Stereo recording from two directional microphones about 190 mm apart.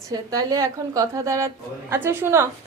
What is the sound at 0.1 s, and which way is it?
A woman's voice, 20° right (ahead or behind).